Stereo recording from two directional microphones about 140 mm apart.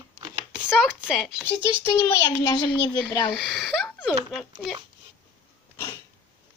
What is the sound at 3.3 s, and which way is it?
Speech, centre (ahead or behind).